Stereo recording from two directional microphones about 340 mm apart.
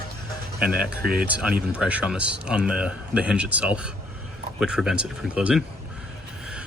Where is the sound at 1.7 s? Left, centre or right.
Centre.